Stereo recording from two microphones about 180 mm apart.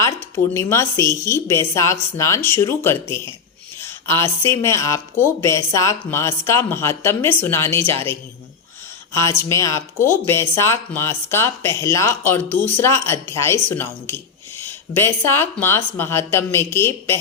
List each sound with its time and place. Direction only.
0.5 s speech: 15° left (ahead or behind)